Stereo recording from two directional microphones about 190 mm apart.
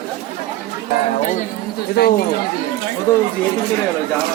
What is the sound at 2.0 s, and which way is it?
Speech, 60° left (ahead or behind).